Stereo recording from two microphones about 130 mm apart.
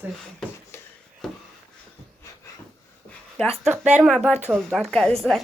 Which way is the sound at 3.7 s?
10° right (ahead or behind).